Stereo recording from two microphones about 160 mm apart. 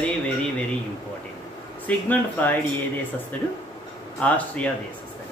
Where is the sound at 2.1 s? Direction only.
10° left (ahead or behind).